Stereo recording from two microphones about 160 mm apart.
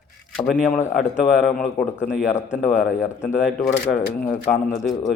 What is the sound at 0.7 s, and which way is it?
Speech, 15° left (ahead or behind).